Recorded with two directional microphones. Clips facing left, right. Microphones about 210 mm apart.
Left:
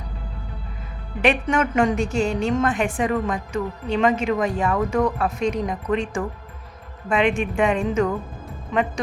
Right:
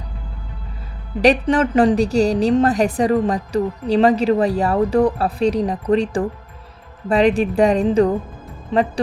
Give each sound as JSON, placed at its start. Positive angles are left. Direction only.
{"t": 1.2, "sound": "a woman's voice", "side_deg": -35}